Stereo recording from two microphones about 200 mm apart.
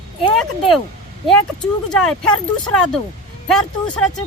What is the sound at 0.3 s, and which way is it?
Speech, centre (ahead or behind).